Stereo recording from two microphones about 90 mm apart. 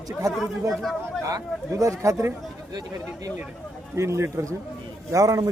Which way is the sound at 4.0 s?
30° right (ahead or behind).